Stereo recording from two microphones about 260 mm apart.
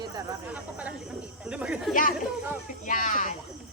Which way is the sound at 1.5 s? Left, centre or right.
Centre.